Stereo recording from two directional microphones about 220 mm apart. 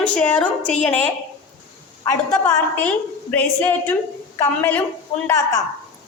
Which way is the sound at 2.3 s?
5° left (ahead or behind).